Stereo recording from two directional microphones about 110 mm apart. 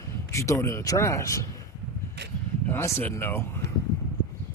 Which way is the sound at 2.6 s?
20° left (ahead or behind).